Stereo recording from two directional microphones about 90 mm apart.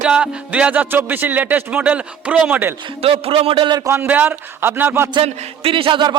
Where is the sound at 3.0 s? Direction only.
90° right.